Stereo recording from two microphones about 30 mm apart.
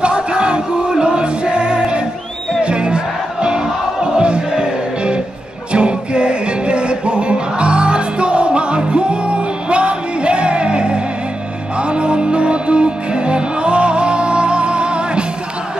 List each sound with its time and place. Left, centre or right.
0.0 s music: right